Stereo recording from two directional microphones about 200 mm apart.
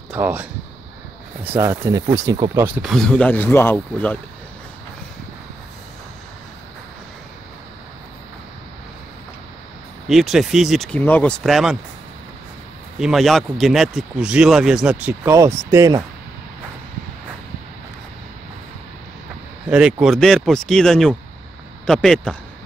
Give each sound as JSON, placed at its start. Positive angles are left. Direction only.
{"t": 0.1, "sound": "speech", "side_deg": -10}
{"t": 2.5, "sound": "speech", "side_deg": -10}
{"t": 10.0, "sound": "speech", "side_deg": 0}
{"t": 13.0, "sound": "speech", "side_deg": 0}
{"t": 19.7, "sound": "speech", "side_deg": -5}